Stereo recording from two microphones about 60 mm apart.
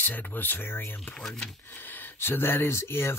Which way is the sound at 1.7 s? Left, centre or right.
Left.